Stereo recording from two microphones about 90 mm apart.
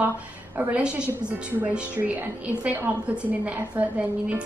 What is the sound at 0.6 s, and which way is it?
A woman's voice, 15° right (ahead or behind).